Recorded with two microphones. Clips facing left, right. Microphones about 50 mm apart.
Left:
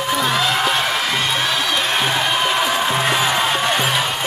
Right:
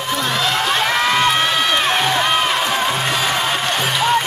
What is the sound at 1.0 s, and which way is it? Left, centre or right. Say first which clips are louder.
Music: right 4 dB; right.